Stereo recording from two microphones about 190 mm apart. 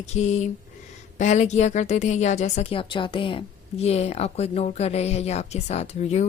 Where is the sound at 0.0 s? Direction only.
35° left (ahead or behind).